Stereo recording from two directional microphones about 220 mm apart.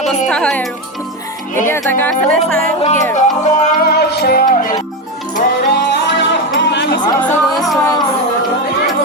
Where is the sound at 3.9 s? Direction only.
50° left (ahead or behind).